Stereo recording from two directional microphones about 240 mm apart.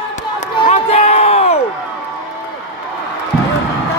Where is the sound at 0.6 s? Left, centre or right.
Left.